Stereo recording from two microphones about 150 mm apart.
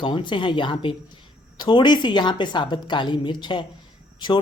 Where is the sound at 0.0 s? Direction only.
30° left (ahead or behind).